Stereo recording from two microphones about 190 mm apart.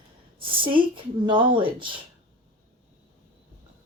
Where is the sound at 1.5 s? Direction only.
25° right (ahead or behind).